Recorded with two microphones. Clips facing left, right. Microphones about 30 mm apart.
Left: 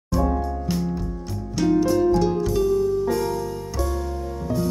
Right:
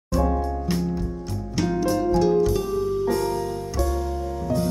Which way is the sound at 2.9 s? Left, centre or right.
Right.